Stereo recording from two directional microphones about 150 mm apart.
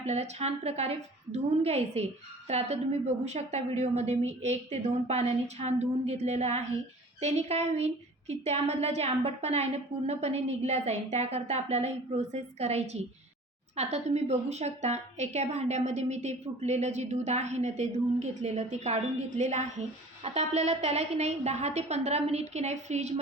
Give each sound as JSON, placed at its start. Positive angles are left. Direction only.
{"t": 0.0, "sound": "a woman's voice", "side_deg": -45}